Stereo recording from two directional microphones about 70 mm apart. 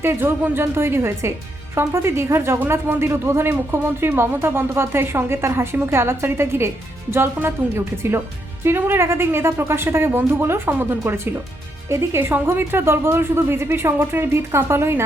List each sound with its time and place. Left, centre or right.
0.0 s speech: right
8.6 s speech: right